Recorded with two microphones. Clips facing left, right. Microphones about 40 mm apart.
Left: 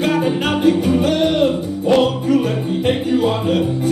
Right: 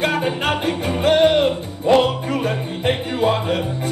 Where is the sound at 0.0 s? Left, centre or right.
Right.